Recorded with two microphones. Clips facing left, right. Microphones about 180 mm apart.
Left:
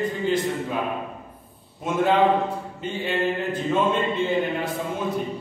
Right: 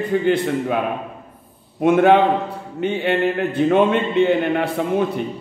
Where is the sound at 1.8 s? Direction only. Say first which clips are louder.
Right 6 dB; 65° right (ahead or behind).